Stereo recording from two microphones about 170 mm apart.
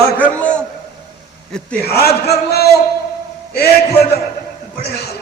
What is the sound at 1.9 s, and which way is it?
A man's voice, 70° left (ahead or behind).